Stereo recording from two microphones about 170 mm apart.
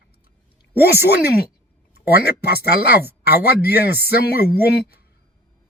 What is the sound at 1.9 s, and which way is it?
Speech, 65° left (ahead or behind).